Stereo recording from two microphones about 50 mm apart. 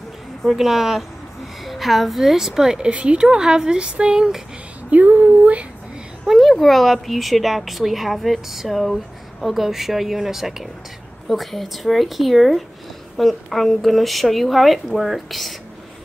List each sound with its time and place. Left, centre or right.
0.4 s a woman's voice: centre
2.9 s speech: right
4.9 s speech: right
6.2 s speech: centre